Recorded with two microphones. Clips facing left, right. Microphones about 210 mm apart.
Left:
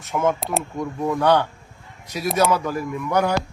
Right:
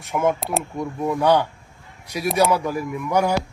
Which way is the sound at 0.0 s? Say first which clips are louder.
Even; 15° right (ahead or behind).